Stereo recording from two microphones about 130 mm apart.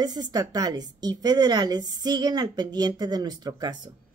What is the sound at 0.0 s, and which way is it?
A woman's voice, 30° right (ahead or behind).